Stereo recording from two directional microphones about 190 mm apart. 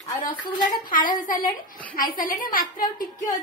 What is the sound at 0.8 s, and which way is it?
A woman's voice, 45° left (ahead or behind).